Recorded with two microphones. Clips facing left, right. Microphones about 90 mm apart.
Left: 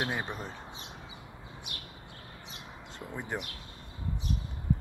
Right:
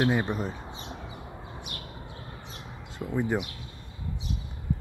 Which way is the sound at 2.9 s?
5° right (ahead or behind).